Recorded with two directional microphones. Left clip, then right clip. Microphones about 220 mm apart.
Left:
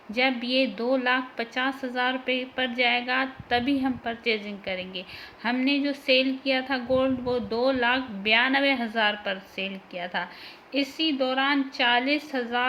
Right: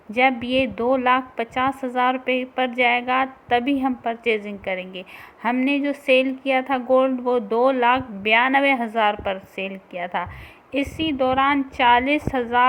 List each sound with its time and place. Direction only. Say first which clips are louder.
0.2 s a woman's voice: right 5 dB; 15° right (ahead or behind)